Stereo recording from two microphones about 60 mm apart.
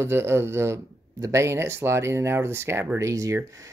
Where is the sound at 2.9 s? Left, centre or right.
Right.